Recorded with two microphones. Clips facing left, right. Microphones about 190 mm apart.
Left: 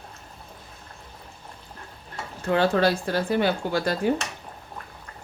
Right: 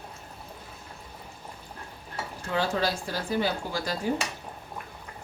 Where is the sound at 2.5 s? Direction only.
60° left (ahead or behind).